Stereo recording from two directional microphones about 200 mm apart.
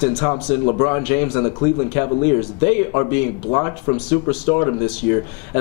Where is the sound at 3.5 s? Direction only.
20° left (ahead or behind).